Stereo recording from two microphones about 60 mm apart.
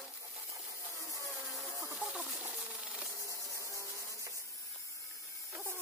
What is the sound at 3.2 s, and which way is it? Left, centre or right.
Insect, left.